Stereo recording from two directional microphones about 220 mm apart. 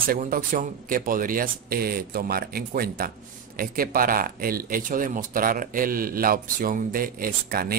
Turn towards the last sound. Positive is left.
turn(degrees=-40)  # may be behind; listen again after turning